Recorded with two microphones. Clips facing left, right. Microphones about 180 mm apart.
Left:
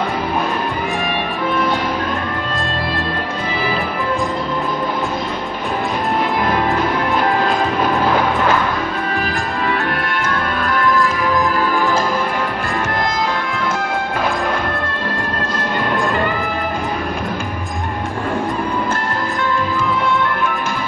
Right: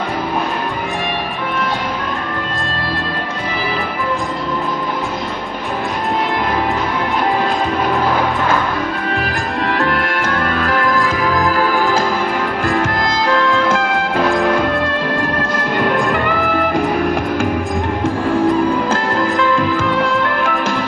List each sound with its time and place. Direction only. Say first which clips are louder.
9.7 s music: right 4 dB; 90° right
13.3 s music: right 6 dB; 90° right
19.8 s music: right 2 dB; 90° right